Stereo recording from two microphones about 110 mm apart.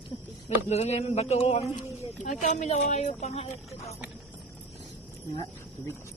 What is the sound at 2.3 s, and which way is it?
Speech, 90° left.